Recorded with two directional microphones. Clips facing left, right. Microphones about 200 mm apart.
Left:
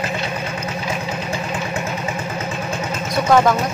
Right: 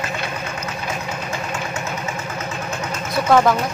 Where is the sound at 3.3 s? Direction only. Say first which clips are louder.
Even; 5° left (ahead or behind).